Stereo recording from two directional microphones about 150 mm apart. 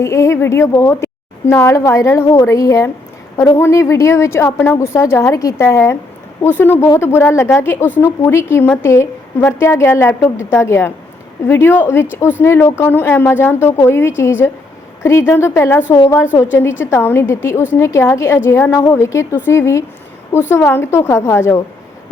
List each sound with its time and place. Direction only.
0.0 s a woman's voice: 20° left (ahead or behind)